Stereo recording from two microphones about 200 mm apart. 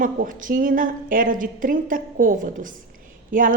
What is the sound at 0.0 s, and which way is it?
A woman's voice, 40° right (ahead or behind).